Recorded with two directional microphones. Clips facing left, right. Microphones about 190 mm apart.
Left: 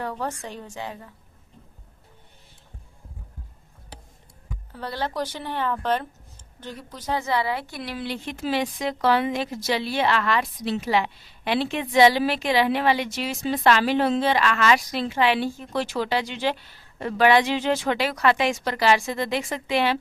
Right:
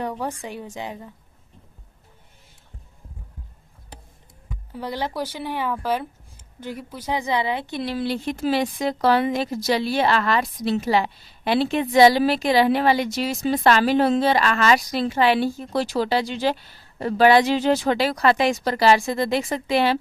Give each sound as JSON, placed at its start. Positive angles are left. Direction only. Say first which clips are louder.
{"t": 0.0, "sound": "a woman's voice", "louder": "right 2 dB", "side_deg": -15}
{"t": 4.7, "sound": "a woman's voice", "louder": "right 2 dB", "side_deg": -15}